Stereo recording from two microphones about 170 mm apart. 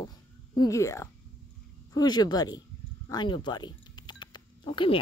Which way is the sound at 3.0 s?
25° left (ahead or behind).